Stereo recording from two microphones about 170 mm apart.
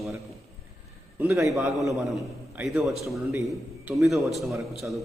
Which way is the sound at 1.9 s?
Centre (ahead or behind).